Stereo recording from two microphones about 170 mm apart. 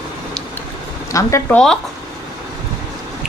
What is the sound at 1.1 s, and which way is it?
Speech, 15° left (ahead or behind).